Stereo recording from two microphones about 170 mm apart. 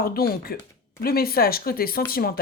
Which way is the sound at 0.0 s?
60° left (ahead or behind).